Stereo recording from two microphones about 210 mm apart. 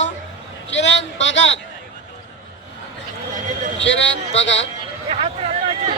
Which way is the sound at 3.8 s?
60° left (ahead or behind).